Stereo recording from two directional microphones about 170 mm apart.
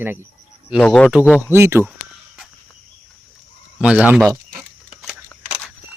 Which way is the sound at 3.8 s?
5° right (ahead or behind).